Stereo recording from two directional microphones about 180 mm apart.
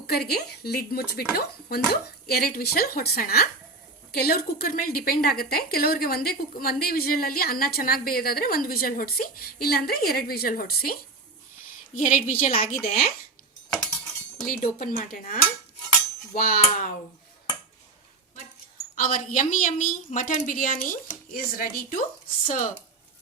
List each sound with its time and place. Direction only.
0.1 s a woman's voice: 60° left (ahead or behind)
12.0 s a woman's voice: 45° left (ahead or behind)
14.4 s a woman's voice: 50° left (ahead or behind)
18.9 s a woman's voice: 50° left (ahead or behind)